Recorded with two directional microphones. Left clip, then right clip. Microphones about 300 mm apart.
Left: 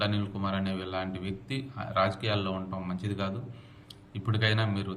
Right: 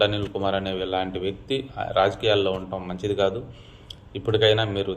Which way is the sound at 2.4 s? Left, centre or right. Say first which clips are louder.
Right 10 dB; right.